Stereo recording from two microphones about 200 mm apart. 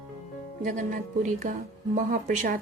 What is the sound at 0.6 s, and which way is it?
A woman's voice, 40° right (ahead or behind).